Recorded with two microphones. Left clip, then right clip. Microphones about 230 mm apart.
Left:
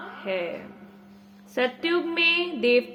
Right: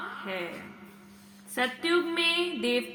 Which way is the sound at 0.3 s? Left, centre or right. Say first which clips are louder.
Left 8 dB; centre.